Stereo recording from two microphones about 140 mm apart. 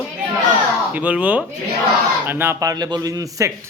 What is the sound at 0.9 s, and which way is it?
A man's voice, 10° right (ahead or behind).